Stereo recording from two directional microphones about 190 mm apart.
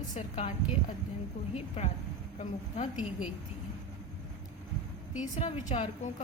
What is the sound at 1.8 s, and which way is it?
Speech, 35° left (ahead or behind).